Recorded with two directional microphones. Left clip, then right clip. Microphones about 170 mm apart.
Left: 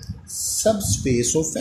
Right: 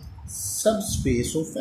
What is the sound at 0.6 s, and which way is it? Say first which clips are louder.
Speech: left 2 dB; 40° left (ahead or behind).